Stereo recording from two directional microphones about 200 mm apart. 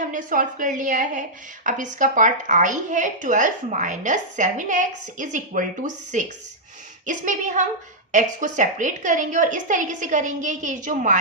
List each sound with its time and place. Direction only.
0.0 s speech: 40° right (ahead or behind)